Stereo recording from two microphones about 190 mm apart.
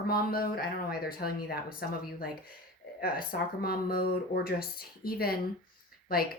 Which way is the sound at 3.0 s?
50° left (ahead or behind).